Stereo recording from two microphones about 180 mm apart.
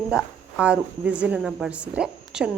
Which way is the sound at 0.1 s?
5° right (ahead or behind).